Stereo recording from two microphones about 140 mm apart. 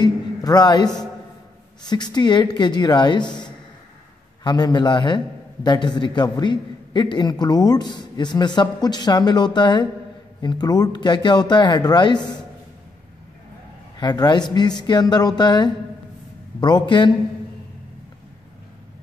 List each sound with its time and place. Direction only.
0.0 s a sound: 30° left (ahead or behind)
1.9 s a man's voice: 30° left (ahead or behind)
3.3 s a man's voice: 5° left (ahead or behind)
4.4 s a man's voice: 30° left (ahead or behind)
13.9 s a man's voice: 30° left (ahead or behind)